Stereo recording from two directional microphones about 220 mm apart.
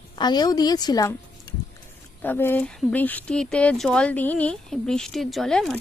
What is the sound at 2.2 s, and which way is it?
Speech, 10° left (ahead or behind).